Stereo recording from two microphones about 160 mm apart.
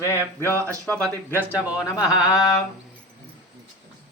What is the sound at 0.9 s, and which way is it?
Speech, 10° left (ahead or behind).